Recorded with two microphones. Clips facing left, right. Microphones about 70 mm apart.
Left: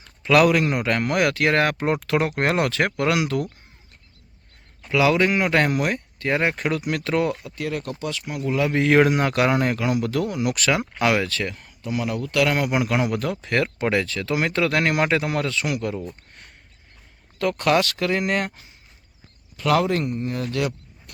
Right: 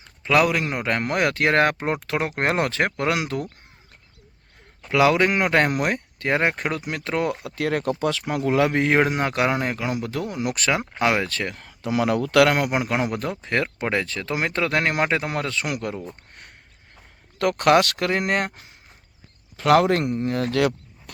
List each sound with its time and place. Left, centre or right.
0.0 s speech: right
1.8 s speech: right
4.9 s speech: right
5.7 s speech: right
7.4 s speech: right
8.4 s speech: right
8.9 s speech: right
11.5 s speech: right
12.5 s speech: right
17.6 s speech: right
18.1 s speech: right